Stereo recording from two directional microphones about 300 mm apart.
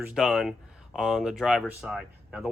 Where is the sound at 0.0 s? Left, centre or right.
Centre.